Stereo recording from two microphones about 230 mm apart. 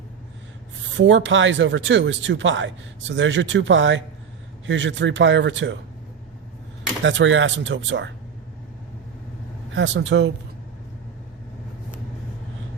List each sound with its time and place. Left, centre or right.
0.9 s a man's voice: right
7.0 s speech: right
9.7 s a man's voice: right